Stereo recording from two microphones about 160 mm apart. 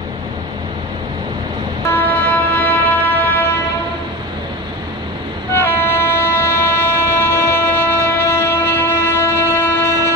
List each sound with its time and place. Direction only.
1.9 s music: 10° left (ahead or behind)
5.5 s train: 15° left (ahead or behind)